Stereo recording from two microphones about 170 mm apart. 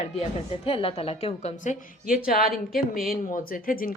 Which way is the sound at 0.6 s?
35° left (ahead or behind).